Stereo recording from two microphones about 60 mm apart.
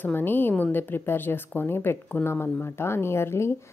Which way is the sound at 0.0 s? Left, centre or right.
Left.